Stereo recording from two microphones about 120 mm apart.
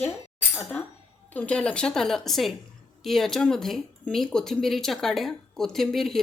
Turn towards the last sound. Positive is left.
turn(degrees=0)  # may be behind; listen again after turning